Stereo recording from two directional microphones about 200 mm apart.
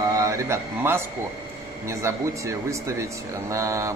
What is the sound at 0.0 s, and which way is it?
Speech, 15° right (ahead or behind).